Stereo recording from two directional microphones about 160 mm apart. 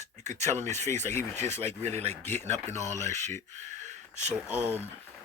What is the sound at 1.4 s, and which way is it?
Speech, 45° right (ahead or behind).